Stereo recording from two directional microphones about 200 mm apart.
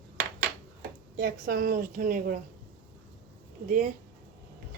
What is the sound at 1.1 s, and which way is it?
A woman's voice, 45° right (ahead or behind).